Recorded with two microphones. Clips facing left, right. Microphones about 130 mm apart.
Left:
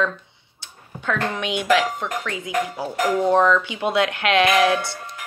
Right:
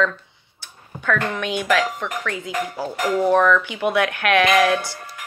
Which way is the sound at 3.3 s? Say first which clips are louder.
Even; 20° left (ahead or behind).